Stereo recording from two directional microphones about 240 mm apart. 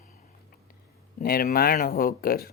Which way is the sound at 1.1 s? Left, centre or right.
Left.